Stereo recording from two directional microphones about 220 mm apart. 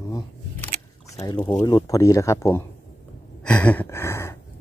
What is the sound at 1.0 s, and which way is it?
Speech, 15° left (ahead or behind).